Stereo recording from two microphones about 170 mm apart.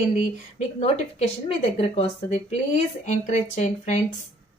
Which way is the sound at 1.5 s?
35° left (ahead or behind).